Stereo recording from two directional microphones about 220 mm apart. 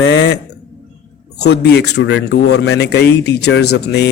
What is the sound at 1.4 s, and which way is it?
Speech, 50° left (ahead or behind).